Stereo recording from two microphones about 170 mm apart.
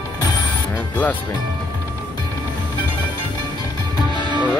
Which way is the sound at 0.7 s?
10° left (ahead or behind).